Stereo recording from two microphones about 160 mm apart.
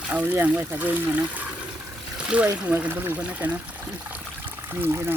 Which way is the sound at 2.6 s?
10° right (ahead or behind).